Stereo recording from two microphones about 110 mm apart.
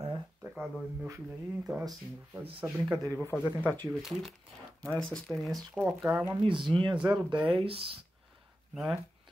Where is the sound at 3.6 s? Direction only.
15° left (ahead or behind).